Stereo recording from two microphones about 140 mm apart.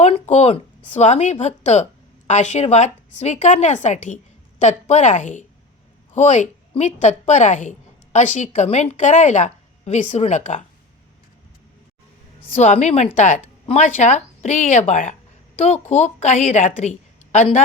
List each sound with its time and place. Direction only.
0.0 s a woman's voice: 55° left (ahead or behind)
12.5 s a woman's voice: 55° left (ahead or behind)